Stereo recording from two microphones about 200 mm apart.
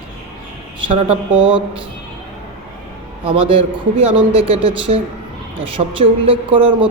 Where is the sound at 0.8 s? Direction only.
30° right (ahead or behind).